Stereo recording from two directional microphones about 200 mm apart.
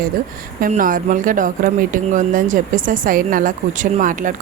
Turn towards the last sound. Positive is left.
turn(degrees=-40)  # may be behind; listen again after turning